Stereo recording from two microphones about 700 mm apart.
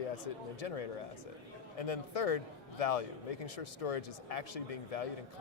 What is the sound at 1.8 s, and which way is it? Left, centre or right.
A man's voice, left.